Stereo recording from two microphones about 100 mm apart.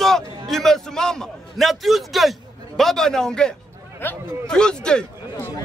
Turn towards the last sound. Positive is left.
turn(degrees=10)  # may be behind; listen again after turning